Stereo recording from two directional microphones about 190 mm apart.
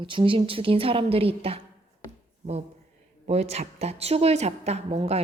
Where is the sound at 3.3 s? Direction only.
35° right (ahead or behind).